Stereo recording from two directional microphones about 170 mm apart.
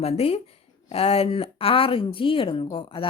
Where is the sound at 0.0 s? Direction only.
35° left (ahead or behind).